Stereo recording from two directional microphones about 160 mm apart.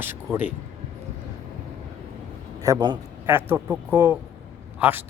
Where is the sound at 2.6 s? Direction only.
25° right (ahead or behind).